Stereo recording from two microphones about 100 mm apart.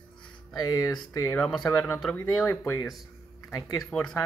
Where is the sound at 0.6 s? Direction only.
35° left (ahead or behind).